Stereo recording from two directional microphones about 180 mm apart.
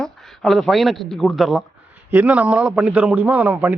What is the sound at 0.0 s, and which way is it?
A man's voice, 5° left (ahead or behind).